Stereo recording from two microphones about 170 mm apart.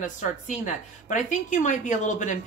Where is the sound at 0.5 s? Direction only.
50° left (ahead or behind).